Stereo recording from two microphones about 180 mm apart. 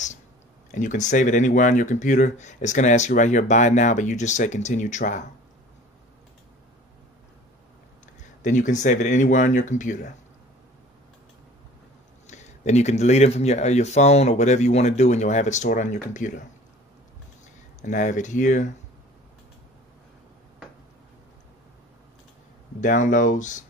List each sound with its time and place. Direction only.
0.7 s speech: 45° left (ahead or behind)
8.4 s speech: 45° left (ahead or behind)
12.3 s speech: 40° left (ahead or behind)
17.8 s speech: 45° left (ahead or behind)
22.8 s speech: 45° left (ahead or behind)